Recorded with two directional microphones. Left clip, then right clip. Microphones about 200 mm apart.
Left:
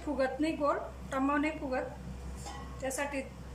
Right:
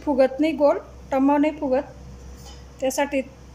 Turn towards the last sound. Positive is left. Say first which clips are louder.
# right 13 dB
turn(degrees=-40)  # may be behind; listen again after turning